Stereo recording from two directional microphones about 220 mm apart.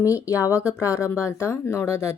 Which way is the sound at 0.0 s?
15° left (ahead or behind).